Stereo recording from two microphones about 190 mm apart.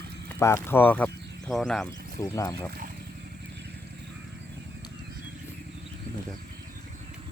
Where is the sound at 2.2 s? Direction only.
15° left (ahead or behind).